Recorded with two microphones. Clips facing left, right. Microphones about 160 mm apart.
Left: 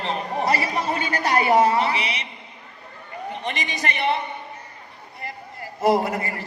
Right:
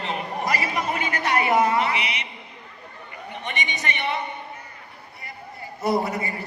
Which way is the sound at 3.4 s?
35° left (ahead or behind).